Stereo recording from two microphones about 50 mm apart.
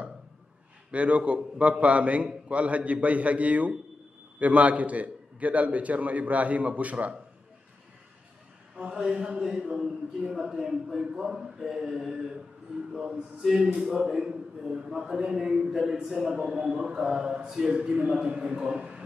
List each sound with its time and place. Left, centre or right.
0.9 s a man's voice: right
8.7 s speech: right
18.8 s a sound: centre